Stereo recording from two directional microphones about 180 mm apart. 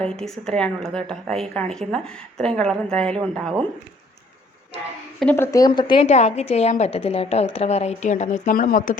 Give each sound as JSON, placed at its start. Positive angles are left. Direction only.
{"t": 0.0, "sound": "a woman's voice", "side_deg": 5}
{"t": 5.2, "sound": "a woman's voice", "side_deg": 10}
{"t": 6.1, "sound": "a woman's voice", "side_deg": 40}